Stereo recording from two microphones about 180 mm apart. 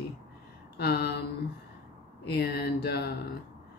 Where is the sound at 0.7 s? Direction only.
65° left (ahead or behind).